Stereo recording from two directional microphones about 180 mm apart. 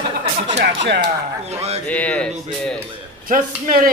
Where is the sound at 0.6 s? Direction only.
65° right (ahead or behind).